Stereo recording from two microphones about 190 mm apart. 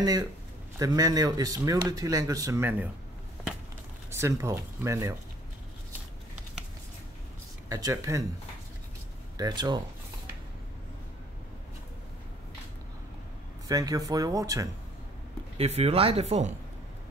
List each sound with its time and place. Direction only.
0.7 s speech: 20° right (ahead or behind)
4.1 s speech: 15° right (ahead or behind)
7.7 s speech: 15° right (ahead or behind)
9.4 s speech: 20° right (ahead or behind)
13.7 s speech: 20° right (ahead or behind)
15.5 s speech: 35° right (ahead or behind)